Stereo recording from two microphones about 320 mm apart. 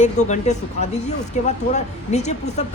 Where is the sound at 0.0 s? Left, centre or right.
Left.